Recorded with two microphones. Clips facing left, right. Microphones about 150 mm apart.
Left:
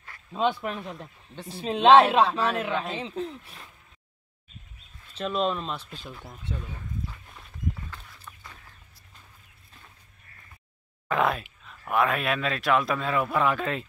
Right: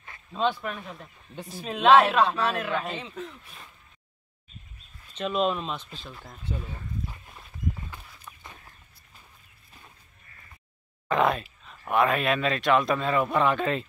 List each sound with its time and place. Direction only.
0.3 s a woman's voice: 15° left (ahead or behind)
5.1 s a man's voice: 5° right (ahead or behind)
5.8 s speech: 10° left (ahead or behind)
6.5 s walk: 10° right (ahead or behind)
11.1 s a sound: centre (ahead or behind)
11.6 s a man's voice: centre (ahead or behind)